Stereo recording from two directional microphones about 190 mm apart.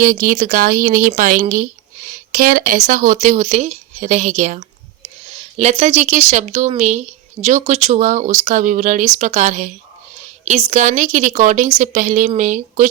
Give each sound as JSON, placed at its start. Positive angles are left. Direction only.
{"t": 0.0, "sound": "a woman's voice", "side_deg": -45}